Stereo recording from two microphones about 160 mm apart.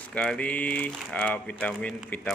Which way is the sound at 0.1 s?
5° left (ahead or behind).